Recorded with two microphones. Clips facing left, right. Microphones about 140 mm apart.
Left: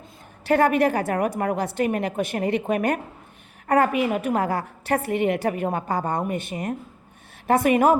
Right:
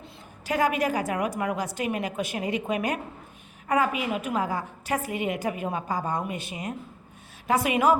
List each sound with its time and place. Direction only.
0.4 s a woman's voice: 60° left (ahead or behind)